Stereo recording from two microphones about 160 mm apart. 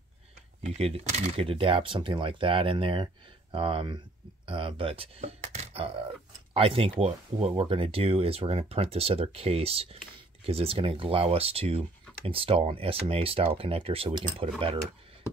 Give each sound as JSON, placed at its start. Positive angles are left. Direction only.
{"t": 0.7, "sound": "speech", "side_deg": -40}